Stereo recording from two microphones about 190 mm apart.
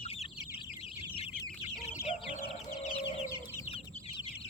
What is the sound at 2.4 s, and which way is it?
Chicken, 30° left (ahead or behind).